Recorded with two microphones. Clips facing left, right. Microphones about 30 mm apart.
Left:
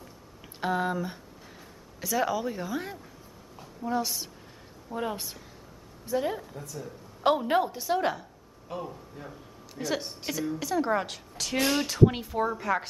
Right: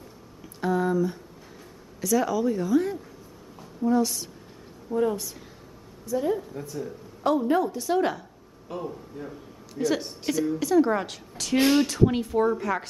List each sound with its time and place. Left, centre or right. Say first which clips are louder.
0.6 s a woman's voice: right 4 dB; left
4.9 s speech: right 7 dB; left
6.5 s speech: right 5 dB; centre
7.2 s a woman's voice: right 1 dB; left
7.8 s a woman's voice: right 3 dB; centre
11.6 s speech: right 6 dB; centre
11.9 s speech: right 1 dB; centre